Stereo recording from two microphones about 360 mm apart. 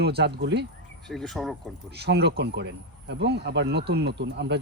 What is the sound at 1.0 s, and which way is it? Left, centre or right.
Speech, centre.